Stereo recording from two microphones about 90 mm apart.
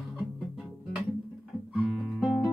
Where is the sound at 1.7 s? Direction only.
5° right (ahead or behind).